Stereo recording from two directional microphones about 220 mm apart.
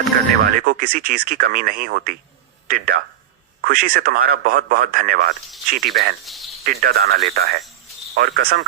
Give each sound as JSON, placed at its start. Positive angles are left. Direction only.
{"t": 0.4, "sound": "a man's voice", "side_deg": -40}
{"t": 6.2, "sound": "speech", "side_deg": 0}
{"t": 6.7, "sound": "speech", "side_deg": -40}